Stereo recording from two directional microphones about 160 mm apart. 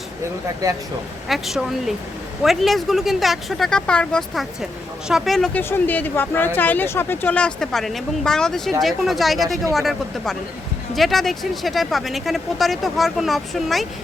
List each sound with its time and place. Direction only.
0.6 s speech: 20° right (ahead or behind)
1.3 s speech: centre (ahead or behind)
5.6 s speech: 10° left (ahead or behind)